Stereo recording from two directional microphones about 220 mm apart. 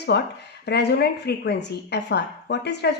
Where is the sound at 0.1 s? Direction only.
50° left (ahead or behind).